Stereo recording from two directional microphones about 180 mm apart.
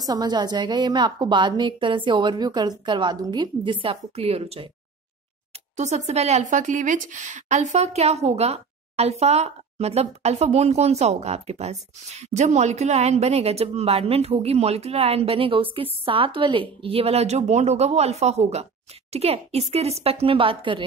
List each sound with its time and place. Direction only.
0.0 s a woman's voice: 20° right (ahead or behind)
5.8 s a woman's voice: 40° right (ahead or behind)